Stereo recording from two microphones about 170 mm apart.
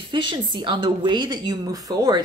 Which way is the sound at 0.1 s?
30° right (ahead or behind).